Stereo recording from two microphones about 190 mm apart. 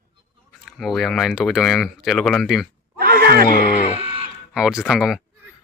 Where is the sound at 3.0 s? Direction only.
50° right (ahead or behind).